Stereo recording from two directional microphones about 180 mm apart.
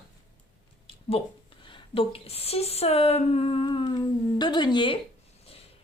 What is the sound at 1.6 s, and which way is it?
Speech, 30° left (ahead or behind).